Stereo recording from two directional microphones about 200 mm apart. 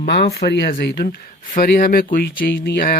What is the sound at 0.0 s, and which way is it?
Speech, 55° left (ahead or behind).